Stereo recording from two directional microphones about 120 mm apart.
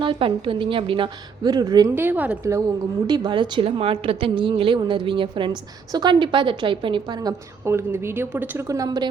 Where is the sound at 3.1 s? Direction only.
40° right (ahead or behind).